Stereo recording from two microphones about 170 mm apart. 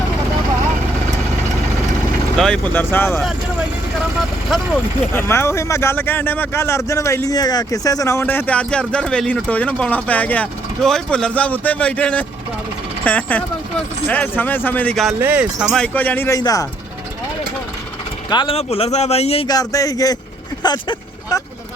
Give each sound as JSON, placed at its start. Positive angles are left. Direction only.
{"t": 2.4, "sound": "speech", "side_deg": 5}
{"t": 4.2, "sound": "vehicle", "side_deg": 0}
{"t": 5.1, "sound": "speech", "side_deg": 15}
{"t": 15.2, "sound": "speech", "side_deg": -10}
{"t": 18.3, "sound": "a man's voice", "side_deg": 30}
{"t": 19.5, "sound": "speech", "side_deg": 20}